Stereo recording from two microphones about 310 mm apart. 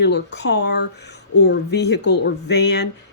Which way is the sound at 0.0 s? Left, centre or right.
Left.